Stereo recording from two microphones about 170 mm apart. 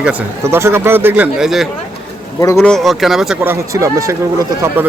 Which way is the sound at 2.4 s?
20° left (ahead or behind).